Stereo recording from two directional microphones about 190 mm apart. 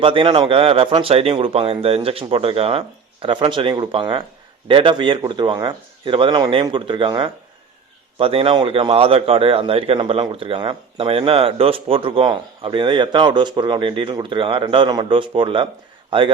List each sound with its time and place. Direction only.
0.0 s a man's voice: 25° right (ahead or behind)